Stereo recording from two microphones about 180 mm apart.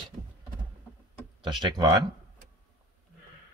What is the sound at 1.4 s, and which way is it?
Speech, 25° right (ahead or behind).